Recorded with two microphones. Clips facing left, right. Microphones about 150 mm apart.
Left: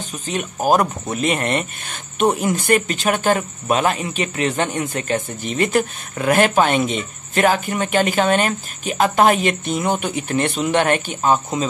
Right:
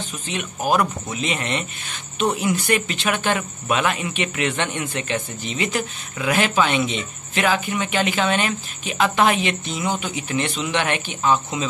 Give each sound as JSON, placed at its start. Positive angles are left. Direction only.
{"t": 0.3, "sound": "speech", "side_deg": 40}